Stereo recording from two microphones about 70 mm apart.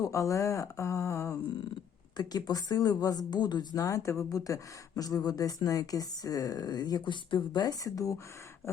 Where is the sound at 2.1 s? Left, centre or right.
Left.